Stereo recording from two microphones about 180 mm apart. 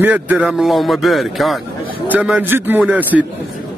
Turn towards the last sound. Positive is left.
turn(degrees=-10)  # may be behind; listen again after turning